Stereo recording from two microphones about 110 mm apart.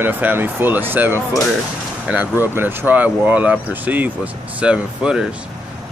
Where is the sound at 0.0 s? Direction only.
15° right (ahead or behind).